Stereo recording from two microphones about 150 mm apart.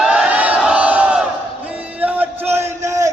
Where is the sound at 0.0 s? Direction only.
5° right (ahead or behind).